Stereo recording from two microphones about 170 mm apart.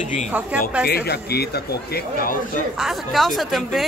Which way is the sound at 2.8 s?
Centre (ahead or behind).